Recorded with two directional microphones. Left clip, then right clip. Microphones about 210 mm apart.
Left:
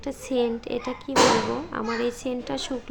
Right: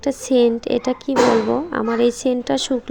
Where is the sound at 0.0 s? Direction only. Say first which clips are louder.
Right 10 dB; 30° right (ahead or behind).